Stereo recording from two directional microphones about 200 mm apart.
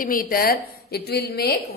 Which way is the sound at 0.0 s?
45° left (ahead or behind).